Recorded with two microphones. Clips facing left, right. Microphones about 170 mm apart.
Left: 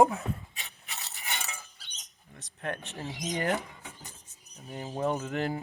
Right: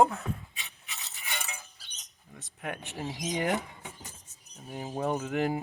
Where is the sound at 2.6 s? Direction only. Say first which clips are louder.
Even; 15° right (ahead or behind).